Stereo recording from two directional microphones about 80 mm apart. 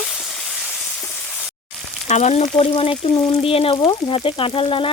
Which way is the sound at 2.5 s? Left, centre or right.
Left.